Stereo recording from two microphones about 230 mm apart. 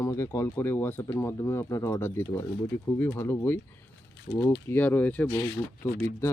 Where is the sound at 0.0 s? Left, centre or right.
Centre.